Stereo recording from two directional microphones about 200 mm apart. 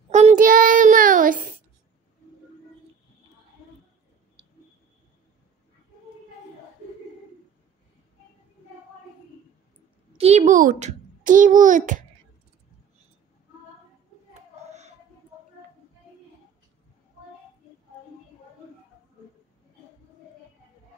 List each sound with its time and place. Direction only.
0.1 s child singing: 35° right (ahead or behind)
10.1 s babbling: 30° right (ahead or behind)
14.3 s a sound: 35° right (ahead or behind)